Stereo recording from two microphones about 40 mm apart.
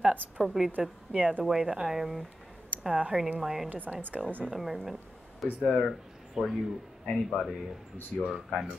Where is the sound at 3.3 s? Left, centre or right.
Centre.